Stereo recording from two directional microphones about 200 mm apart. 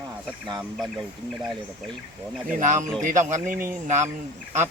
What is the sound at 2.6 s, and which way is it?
Speech, 40° right (ahead or behind).